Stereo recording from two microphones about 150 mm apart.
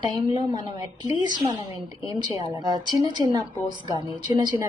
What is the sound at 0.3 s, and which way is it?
A woman's voice, 30° right (ahead or behind).